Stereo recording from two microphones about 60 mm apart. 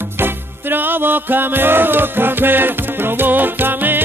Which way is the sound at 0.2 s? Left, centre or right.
Right.